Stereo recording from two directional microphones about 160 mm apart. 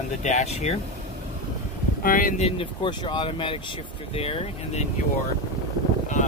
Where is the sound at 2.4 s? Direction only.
35° left (ahead or behind).